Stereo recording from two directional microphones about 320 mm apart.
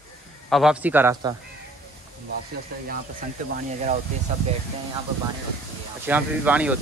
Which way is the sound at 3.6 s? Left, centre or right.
Right.